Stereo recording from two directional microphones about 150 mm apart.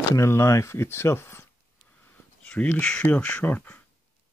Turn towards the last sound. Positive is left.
turn(degrees=10)  # may be behind; listen again after turning